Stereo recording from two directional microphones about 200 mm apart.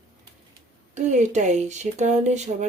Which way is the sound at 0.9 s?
35° right (ahead or behind).